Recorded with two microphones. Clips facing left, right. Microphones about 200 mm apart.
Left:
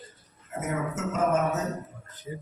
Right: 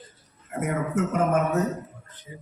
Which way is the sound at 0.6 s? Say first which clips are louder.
Right 5 dB; 60° right (ahead or behind).